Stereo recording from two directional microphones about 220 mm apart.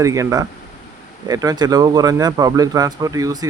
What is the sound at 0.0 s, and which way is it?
Speech, 15° right (ahead or behind).